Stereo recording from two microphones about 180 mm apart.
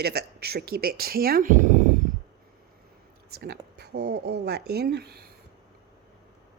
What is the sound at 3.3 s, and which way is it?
Speech, 60° right (ahead or behind).